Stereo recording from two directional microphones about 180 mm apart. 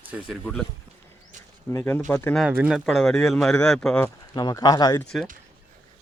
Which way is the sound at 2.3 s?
5° right (ahead or behind).